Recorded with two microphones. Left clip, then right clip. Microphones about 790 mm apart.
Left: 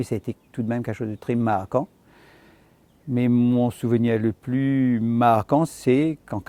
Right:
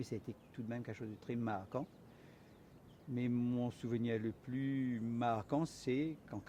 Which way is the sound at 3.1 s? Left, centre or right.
Left.